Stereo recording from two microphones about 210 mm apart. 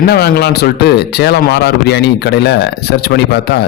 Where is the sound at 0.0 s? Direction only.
50° left (ahead or behind).